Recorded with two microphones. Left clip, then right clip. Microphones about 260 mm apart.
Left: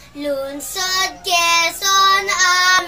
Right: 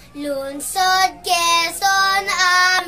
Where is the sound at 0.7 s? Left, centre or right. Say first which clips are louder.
Right 4 dB; centre.